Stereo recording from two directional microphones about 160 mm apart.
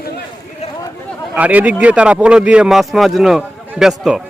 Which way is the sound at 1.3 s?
10° right (ahead or behind).